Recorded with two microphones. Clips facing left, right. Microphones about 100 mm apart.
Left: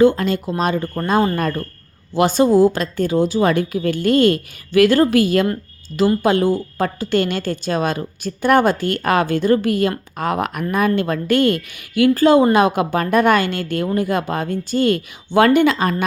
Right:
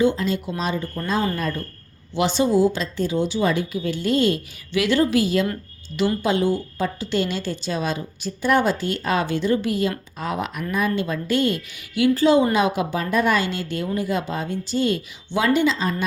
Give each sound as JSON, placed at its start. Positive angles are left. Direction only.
{"t": 0.0, "sound": "a woman's voice", "side_deg": 50}